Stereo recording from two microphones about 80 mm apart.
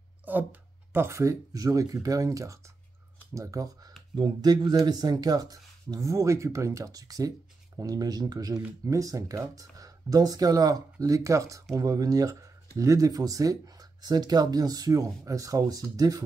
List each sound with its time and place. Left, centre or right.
0.2 s speech: right
4.1 s speech: right
5.9 s speech: right